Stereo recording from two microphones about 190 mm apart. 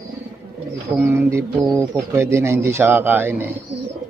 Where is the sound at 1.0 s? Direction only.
10° right (ahead or behind).